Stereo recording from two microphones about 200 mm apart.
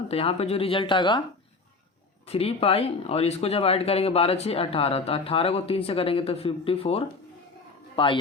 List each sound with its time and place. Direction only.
0.1 s speech: 30° left (ahead or behind)
2.2 s speech: 30° left (ahead or behind)